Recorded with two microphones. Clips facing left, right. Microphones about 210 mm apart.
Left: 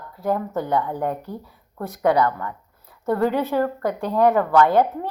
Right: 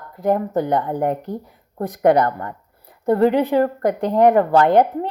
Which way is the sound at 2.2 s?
50° right (ahead or behind).